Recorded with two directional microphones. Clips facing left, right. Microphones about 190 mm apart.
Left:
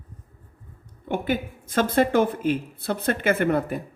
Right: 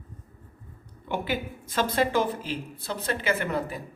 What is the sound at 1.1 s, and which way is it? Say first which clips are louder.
Speech: left 4 dB; 50° left (ahead or behind).